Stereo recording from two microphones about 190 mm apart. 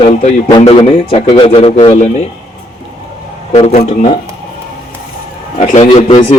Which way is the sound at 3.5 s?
35° left (ahead or behind).